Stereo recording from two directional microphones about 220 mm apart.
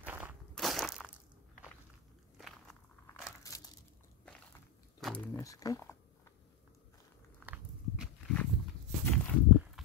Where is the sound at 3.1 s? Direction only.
15° left (ahead or behind).